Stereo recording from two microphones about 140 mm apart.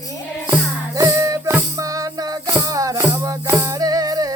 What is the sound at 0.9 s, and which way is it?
Music, 20° right (ahead or behind).